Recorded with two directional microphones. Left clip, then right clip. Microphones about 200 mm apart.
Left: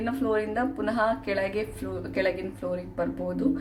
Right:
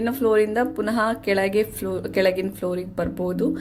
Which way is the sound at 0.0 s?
35° right (ahead or behind).